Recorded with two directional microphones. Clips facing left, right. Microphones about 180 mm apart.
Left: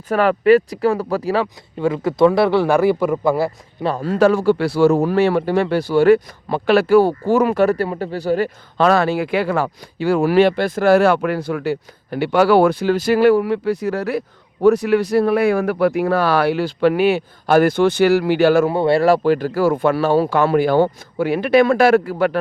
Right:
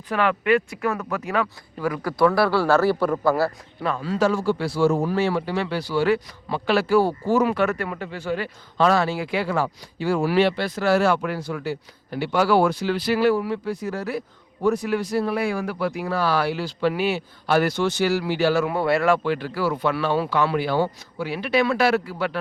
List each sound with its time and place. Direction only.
0.1 s speech: 40° left (ahead or behind); by 3.8 s 15° left (ahead or behind)
3.8 s speech: 40° left (ahead or behind)
4.1 s speech: 60° left (ahead or behind)
7.5 s speech: 35° left (ahead or behind)
8.8 s speech: 60° left (ahead or behind)
18.7 s speech: 30° left (ahead or behind); by 22.4 s 50° left (ahead or behind)